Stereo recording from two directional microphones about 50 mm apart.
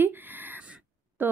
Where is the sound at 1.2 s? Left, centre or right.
Right.